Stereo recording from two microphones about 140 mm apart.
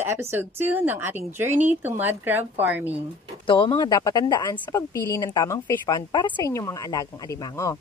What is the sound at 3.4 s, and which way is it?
Speech, 40° left (ahead or behind).